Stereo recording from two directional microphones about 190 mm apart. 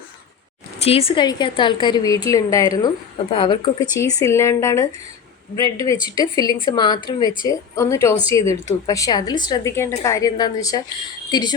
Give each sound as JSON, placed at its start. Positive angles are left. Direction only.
{"t": 0.8, "sound": "a woman's voice", "side_deg": 30}